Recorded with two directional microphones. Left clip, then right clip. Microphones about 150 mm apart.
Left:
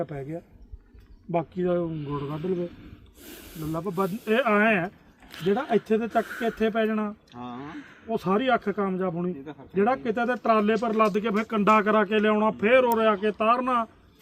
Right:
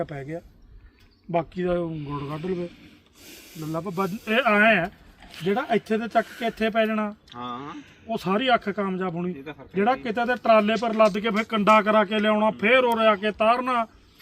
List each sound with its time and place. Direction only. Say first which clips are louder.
0.0 s speech: right 1 dB; 25° right (ahead or behind)
3.2 s snake: left 1 dB; 35° left (ahead or behind)
3.6 s speech: even; 25° right (ahead or behind)
5.7 s speech: right 2 dB; 20° right (ahead or behind)
7.3 s speech: right 4 dB; 30° left (ahead or behind)
8.1 s speech: right 2 dB; 25° right (ahead or behind)